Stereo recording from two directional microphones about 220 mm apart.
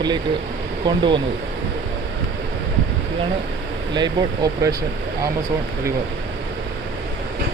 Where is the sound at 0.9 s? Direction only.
20° right (ahead or behind).